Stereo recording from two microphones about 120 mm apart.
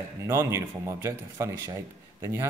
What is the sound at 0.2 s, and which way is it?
Speech, 20° right (ahead or behind).